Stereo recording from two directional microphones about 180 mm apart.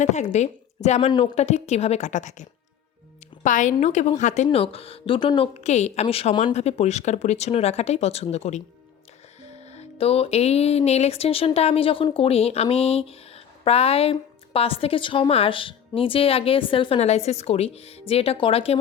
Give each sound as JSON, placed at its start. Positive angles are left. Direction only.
{"t": 0.0, "sound": "a woman's voice", "side_deg": 40}
{"t": 4.4, "sound": "speech", "side_deg": 30}